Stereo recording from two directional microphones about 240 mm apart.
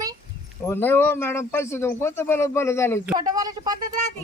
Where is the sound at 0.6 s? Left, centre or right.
Centre.